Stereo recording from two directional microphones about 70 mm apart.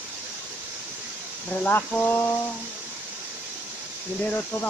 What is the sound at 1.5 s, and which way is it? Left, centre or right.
Speech, left.